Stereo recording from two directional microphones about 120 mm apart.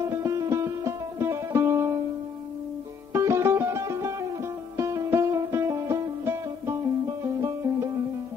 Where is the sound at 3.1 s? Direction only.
25° right (ahead or behind).